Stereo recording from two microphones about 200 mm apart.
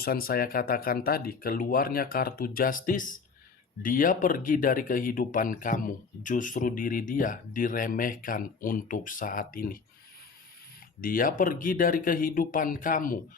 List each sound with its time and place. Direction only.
0.0 s speech: 50° left (ahead or behind)
11.0 s speech: 45° left (ahead or behind)